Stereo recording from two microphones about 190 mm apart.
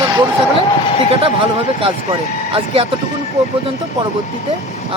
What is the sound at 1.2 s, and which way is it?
Speech, 30° right (ahead or behind).